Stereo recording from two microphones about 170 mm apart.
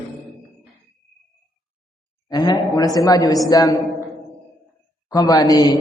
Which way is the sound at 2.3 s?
25° left (ahead or behind).